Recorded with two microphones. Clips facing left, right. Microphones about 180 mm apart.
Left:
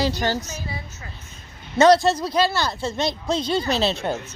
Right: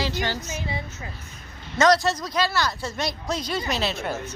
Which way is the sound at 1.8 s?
30° left (ahead or behind).